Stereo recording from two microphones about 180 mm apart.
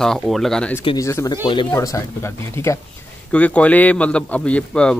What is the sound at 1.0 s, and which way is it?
A man's voice, 15° left (ahead or behind).